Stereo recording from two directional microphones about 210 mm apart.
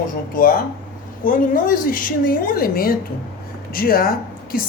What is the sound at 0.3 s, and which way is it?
A woman's voice, 40° left (ahead or behind).